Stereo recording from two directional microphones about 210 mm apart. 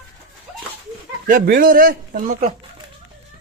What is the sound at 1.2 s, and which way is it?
Speech, 40° right (ahead or behind).